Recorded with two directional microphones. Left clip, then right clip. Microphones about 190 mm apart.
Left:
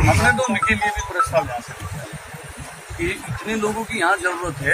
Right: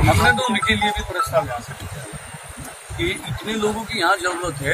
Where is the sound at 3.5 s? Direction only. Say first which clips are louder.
Even; 5° right (ahead or behind).